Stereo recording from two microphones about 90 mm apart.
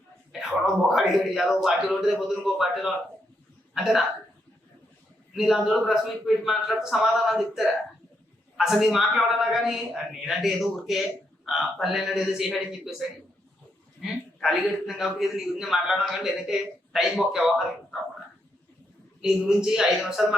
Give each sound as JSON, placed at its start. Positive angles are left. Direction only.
{"t": 0.3, "sound": "a man's voice", "side_deg": -5}
{"t": 5.4, "sound": "a man's voice", "side_deg": -5}
{"t": 19.2, "sound": "a woman's voice", "side_deg": -5}